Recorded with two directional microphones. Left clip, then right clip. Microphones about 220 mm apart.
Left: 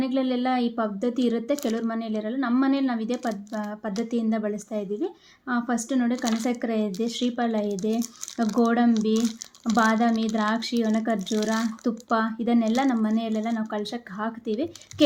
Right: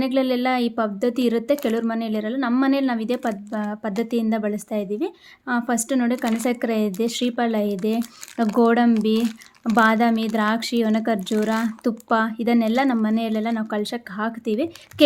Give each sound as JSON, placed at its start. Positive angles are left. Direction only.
{"t": 0.0, "sound": "speech", "side_deg": -35}